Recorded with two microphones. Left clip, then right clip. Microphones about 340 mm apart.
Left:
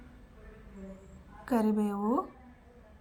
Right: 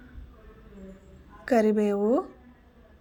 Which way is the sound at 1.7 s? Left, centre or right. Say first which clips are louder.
Right 7 dB; left.